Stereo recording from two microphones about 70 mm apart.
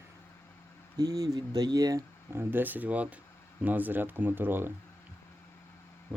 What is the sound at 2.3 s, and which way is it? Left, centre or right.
Speech, right.